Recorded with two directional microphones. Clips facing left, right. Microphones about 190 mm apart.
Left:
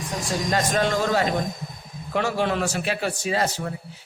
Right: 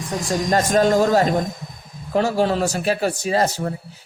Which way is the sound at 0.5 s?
40° right (ahead or behind).